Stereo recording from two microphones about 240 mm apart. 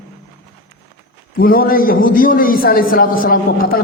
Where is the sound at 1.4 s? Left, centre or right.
Left.